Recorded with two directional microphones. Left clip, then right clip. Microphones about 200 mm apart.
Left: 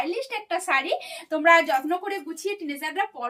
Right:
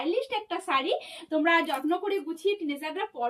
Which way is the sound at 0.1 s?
15° left (ahead or behind).